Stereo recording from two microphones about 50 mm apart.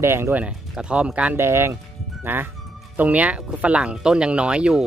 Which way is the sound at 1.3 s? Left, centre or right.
Right.